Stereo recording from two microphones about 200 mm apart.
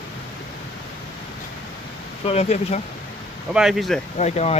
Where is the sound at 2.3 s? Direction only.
35° left (ahead or behind).